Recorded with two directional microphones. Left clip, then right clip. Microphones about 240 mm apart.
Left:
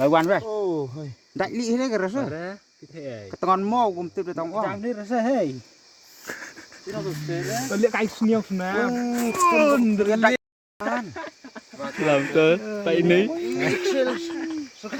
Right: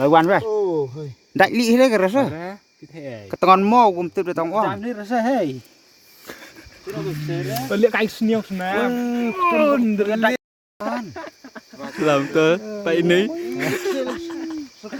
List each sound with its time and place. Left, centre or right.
0.0 s speech: right
0.4 s speech: centre
1.4 s speech: right
2.3 s speech: centre
3.2 s speech: right
4.6 s speech: right
6.2 s a sound: centre
7.0 s speech: right
8.3 s speech: centre
10.1 s speech: right
10.8 s a sound: centre